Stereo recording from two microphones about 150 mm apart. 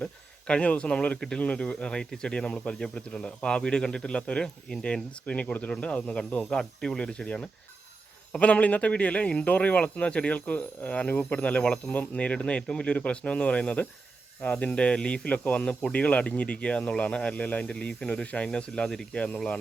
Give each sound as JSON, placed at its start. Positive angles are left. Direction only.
{"t": 0.0, "sound": "speech", "side_deg": 5}